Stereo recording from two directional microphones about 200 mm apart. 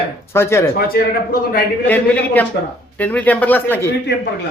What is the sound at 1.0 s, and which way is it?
Speech, 50° left (ahead or behind).